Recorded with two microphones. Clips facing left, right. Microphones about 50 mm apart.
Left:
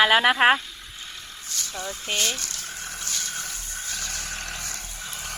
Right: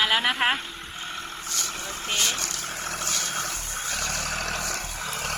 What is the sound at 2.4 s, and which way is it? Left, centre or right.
Vehicle, right.